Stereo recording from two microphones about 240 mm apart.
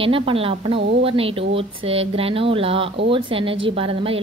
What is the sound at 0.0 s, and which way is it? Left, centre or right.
A woman's voice, right.